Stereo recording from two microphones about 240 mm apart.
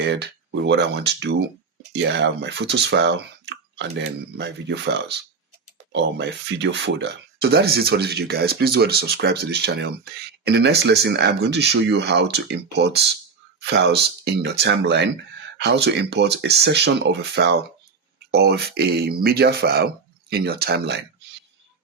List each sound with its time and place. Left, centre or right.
0.0 s speech: right